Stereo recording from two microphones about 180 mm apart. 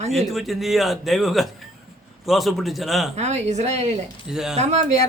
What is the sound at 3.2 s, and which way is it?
Speech, 40° right (ahead or behind).